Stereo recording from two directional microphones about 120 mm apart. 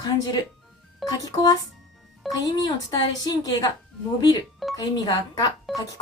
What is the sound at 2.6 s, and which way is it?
Speech, 35° left (ahead or behind).